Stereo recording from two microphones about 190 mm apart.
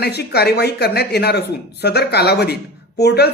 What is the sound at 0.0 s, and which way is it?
A woman's voice, 60° left (ahead or behind).